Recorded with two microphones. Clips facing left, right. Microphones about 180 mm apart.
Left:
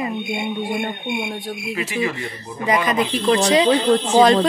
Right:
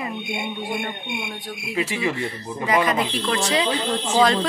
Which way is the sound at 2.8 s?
25° left (ahead or behind).